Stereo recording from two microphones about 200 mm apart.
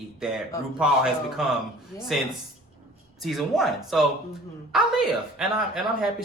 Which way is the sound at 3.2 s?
Centre (ahead or behind).